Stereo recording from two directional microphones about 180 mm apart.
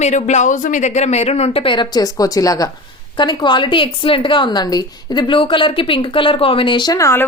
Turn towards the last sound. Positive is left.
turn(degrees=15)  # may be behind; listen again after turning